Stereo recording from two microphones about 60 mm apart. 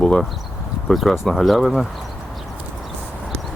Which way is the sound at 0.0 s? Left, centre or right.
Centre.